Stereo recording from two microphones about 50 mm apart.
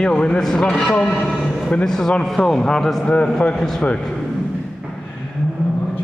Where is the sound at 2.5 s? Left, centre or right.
Centre.